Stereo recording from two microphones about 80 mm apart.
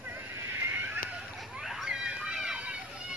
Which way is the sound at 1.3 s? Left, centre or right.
Centre.